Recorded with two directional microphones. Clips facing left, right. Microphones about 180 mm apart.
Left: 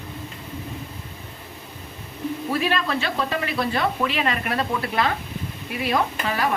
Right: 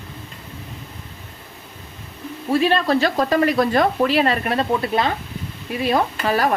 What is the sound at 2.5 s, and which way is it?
Speech, 30° right (ahead or behind).